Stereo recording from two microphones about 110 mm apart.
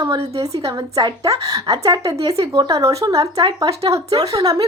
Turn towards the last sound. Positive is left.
turn(degrees=-35)  # may be behind; listen again after turning